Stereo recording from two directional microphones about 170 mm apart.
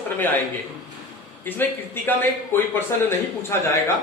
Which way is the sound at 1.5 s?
10° left (ahead or behind).